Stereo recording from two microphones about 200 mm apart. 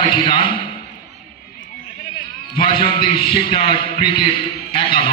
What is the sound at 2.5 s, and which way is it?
A man's voice, 25° left (ahead or behind).